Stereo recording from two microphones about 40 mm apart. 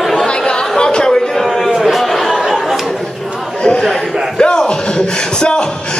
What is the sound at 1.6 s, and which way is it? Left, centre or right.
Chatter, centre.